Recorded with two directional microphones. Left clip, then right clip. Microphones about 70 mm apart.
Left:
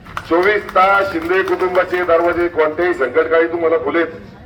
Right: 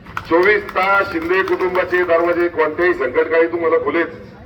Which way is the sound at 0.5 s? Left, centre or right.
Left.